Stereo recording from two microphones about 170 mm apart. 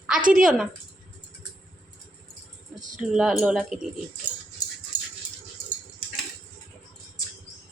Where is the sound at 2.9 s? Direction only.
5° right (ahead or behind).